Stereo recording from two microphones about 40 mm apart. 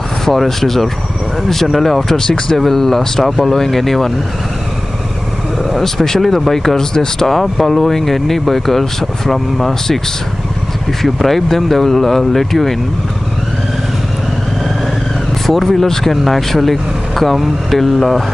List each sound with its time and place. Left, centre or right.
0.2 s speech: centre
5.7 s speech: centre
7.2 s speech: centre
11.0 s speech: centre
15.4 s speech: centre